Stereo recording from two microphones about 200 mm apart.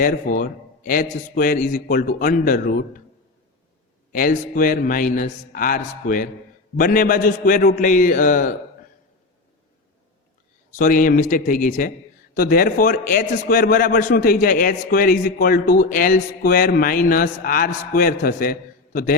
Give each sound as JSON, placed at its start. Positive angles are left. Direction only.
{"t": 0.0, "sound": "a man's voice", "side_deg": 45}
{"t": 4.1, "sound": "a man's voice", "side_deg": 45}
{"t": 10.8, "sound": "a man's voice", "side_deg": 40}